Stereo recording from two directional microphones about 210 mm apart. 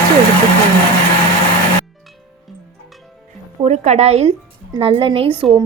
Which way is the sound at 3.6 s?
30° right (ahead or behind).